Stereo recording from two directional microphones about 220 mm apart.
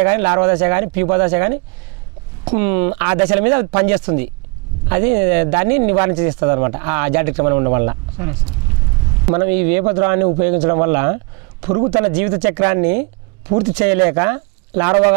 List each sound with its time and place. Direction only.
0.0 s speech: 15° right (ahead or behind)
9.3 s a man's voice: 10° right (ahead or behind)
11.9 s speech: 10° right (ahead or behind)